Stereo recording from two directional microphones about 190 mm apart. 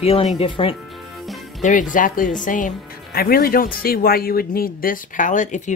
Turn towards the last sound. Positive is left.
turn(degrees=40)  # may be behind; listen again after turning